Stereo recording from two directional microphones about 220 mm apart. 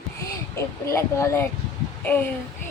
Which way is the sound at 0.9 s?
15° left (ahead or behind).